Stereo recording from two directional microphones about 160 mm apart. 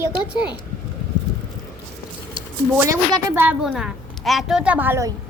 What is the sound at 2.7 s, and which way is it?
Speech, 15° right (ahead or behind).